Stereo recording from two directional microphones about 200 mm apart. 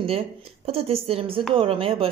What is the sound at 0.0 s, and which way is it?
Speech, 30° right (ahead or behind).